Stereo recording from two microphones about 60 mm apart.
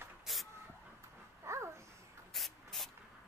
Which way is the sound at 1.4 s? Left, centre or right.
Right.